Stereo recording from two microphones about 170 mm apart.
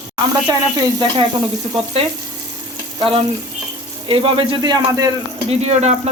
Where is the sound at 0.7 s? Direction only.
25° right (ahead or behind).